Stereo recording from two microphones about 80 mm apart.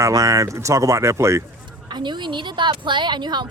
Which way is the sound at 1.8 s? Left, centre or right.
Right.